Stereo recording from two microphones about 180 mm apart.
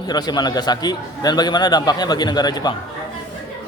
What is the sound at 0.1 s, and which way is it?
A man's voice, 20° left (ahead or behind).